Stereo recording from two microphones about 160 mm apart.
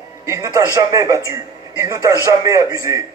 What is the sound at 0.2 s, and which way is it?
A man's voice, 20° right (ahead or behind).